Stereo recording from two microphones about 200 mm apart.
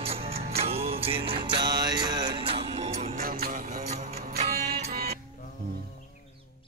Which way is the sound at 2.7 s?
30° right (ahead or behind).